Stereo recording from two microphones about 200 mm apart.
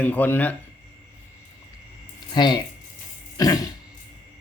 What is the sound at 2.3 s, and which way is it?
Speech, 20° left (ahead or behind).